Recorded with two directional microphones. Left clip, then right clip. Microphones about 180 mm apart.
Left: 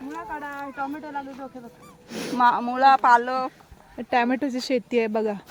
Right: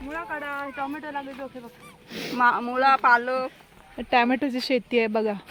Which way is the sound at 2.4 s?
70° left (ahead or behind).